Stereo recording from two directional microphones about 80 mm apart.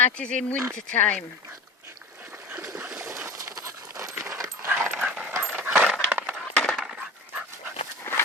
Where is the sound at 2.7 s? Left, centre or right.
Right.